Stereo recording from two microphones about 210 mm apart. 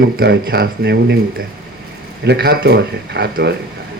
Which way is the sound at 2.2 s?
50° right (ahead or behind).